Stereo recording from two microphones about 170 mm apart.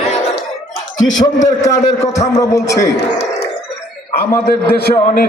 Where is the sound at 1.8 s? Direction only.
40° left (ahead or behind).